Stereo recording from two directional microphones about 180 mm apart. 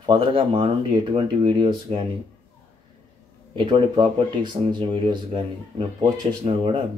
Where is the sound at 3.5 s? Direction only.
25° right (ahead or behind).